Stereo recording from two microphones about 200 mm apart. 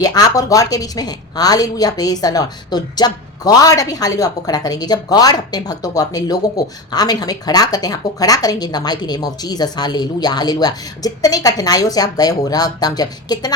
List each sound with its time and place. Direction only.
0.0 s a woman's voice: 20° left (ahead or behind)